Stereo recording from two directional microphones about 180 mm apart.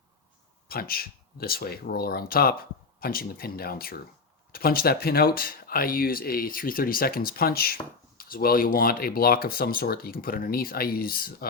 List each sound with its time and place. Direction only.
0.7 s speech: 55° left (ahead or behind)